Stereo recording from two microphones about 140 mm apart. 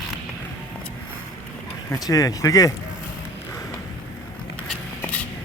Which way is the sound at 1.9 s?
25° left (ahead or behind).